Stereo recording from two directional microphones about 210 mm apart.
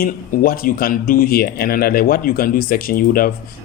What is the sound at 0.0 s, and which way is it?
Speech, 45° left (ahead or behind).